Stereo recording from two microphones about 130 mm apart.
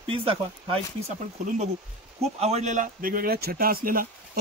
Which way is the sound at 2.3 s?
55° right (ahead or behind).